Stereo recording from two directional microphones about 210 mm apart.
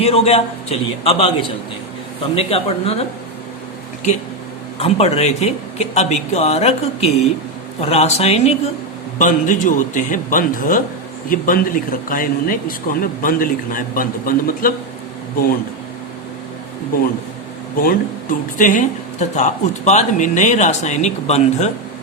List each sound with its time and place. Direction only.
0.0 s a man's voice: 30° left (ahead or behind)
4.8 s speech: 30° left (ahead or behind)
17.8 s speech: 40° left (ahead or behind)